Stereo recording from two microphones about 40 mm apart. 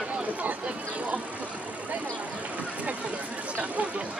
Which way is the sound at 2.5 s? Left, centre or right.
Right.